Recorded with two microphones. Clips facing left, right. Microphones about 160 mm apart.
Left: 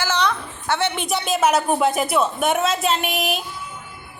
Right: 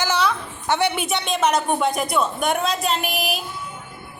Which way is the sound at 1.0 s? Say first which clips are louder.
Left 1 dB; centre (ahead or behind).